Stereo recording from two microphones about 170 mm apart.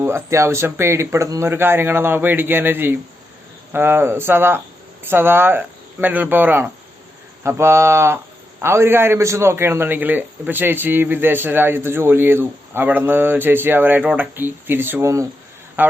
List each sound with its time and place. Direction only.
0.0 s a man's voice: 15° right (ahead or behind)